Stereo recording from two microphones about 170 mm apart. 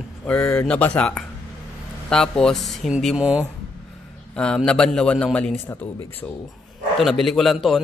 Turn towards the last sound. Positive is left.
turn(degrees=0)  # may be behind; listen again after turning